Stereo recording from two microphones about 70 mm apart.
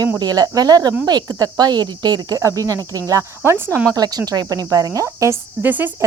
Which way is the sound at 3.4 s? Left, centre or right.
Right.